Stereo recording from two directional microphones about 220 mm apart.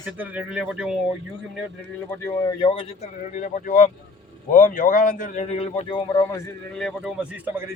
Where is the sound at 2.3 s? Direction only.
25° left (ahead or behind).